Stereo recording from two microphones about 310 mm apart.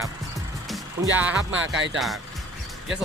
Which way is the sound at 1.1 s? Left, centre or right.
Centre.